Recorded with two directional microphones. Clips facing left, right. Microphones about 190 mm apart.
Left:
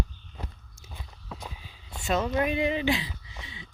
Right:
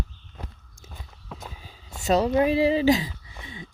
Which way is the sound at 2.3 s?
30° right (ahead or behind).